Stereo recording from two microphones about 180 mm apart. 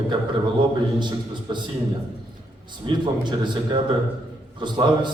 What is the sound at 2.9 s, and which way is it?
A man's voice, 25° right (ahead or behind).